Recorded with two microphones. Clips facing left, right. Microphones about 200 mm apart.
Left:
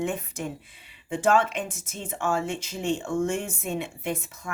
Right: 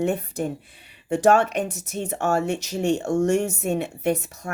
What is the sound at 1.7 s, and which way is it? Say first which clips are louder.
Speech: right 7 dB; 65° right (ahead or behind).